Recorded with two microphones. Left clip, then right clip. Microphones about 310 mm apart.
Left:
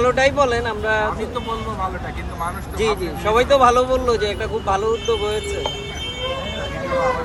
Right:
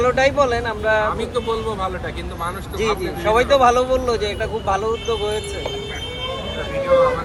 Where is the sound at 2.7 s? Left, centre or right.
Centre.